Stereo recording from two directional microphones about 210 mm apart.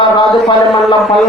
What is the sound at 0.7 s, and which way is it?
Speech, centre (ahead or behind).